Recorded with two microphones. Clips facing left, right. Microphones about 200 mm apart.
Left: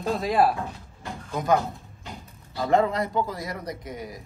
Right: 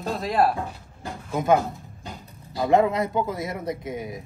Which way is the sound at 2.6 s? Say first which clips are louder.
Right 2 dB; 20° right (ahead or behind).